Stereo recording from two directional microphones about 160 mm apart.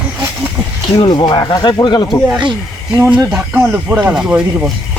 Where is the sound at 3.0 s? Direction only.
15° right (ahead or behind).